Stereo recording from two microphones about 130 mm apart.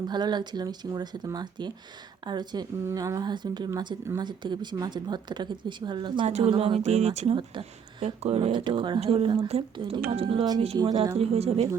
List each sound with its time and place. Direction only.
0.1 s speech: 35° right (ahead or behind)
6.2 s speech: 55° right (ahead or behind)
8.5 s speech: 40° right (ahead or behind)
10.8 s a woman's voice: 30° right (ahead or behind)
11.2 s speech: 50° right (ahead or behind)